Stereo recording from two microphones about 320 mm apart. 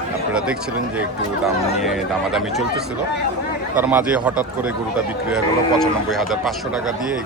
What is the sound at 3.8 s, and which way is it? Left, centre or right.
Speech, centre.